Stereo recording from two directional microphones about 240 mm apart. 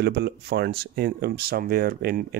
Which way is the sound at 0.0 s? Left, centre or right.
Right.